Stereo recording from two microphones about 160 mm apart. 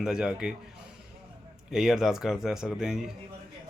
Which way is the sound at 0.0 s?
5° right (ahead or behind).